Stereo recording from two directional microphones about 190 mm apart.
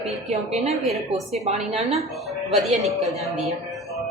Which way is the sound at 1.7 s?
35° right (ahead or behind).